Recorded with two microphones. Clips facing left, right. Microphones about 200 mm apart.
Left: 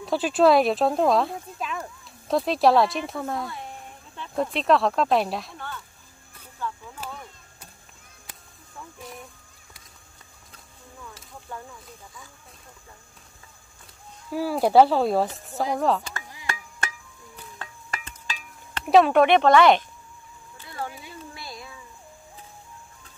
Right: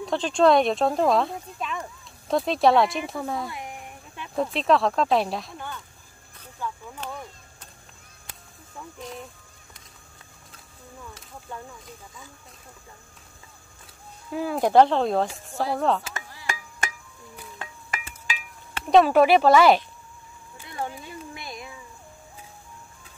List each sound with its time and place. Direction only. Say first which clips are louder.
0.0 s speech: left 1 dB; 5° left (ahead or behind)
3.4 s a sound: right 1 dB; 15° right (ahead or behind)
4.4 s speech: even; centre (ahead or behind)
6.6 s a sound: even; 15° right (ahead or behind)
7.0 s speech: right 2 dB; 5° left (ahead or behind)
14.3 s speech: left 1 dB; 5° left (ahead or behind)
17.6 s chop: right 1 dB; 15° right (ahead or behind)
18.9 s speech: even; centre (ahead or behind)
20.5 s a sound: right 2 dB; 20° right (ahead or behind)